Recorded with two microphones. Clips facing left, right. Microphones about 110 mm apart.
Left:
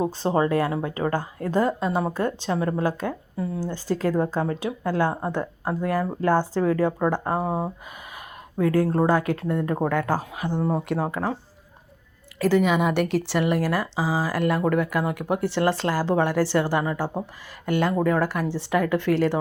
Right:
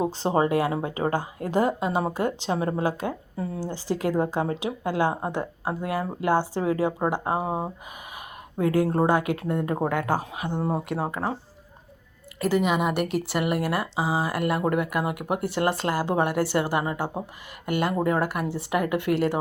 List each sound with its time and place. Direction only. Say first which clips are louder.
0.0 s speech: left 1 dB; 20° right (ahead or behind)
10.7 s speech: left 2 dB; 5° right (ahead or behind)
12.4 s speech: left 3 dB; 5° right (ahead or behind)
15.4 s speech: left 2 dB; 50° right (ahead or behind)
16.0 s speech: left 3 dB; 15° right (ahead or behind)